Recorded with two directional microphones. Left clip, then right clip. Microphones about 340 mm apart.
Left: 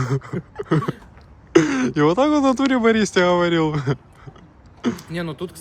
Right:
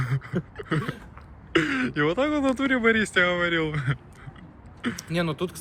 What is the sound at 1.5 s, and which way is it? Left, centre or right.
Speech, centre.